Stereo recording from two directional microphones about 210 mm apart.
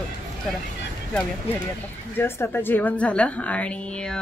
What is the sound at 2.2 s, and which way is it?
A woman's voice, 10° left (ahead or behind).